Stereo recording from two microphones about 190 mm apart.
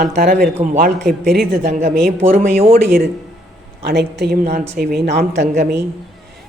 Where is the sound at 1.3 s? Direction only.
50° right (ahead or behind).